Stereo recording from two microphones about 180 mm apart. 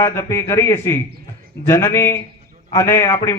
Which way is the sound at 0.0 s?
15° left (ahead or behind).